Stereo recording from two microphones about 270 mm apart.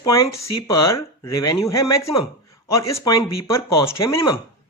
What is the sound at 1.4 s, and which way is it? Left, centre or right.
Speech, centre.